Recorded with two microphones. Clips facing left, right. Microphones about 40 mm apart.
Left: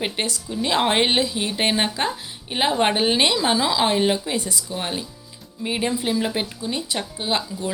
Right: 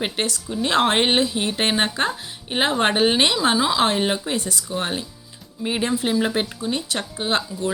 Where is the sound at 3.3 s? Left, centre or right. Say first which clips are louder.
Right 1 dB; right.